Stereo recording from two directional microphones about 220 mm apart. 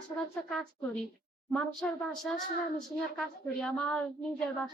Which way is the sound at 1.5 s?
5° left (ahead or behind).